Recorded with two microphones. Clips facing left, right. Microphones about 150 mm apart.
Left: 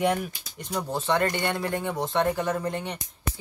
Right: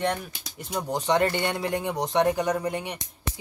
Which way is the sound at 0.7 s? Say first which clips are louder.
Right 2 dB; 15° right (ahead or behind).